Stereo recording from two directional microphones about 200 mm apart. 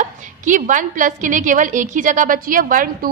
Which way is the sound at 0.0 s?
40° right (ahead or behind).